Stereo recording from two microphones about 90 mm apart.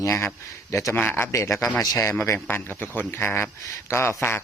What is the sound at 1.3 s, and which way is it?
Speech, 35° left (ahead or behind).